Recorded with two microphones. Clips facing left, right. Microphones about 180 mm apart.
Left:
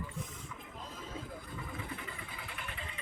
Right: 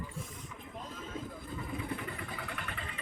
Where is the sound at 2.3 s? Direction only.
60° right (ahead or behind).